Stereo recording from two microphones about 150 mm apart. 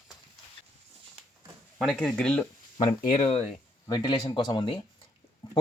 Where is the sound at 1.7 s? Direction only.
5° left (ahead or behind).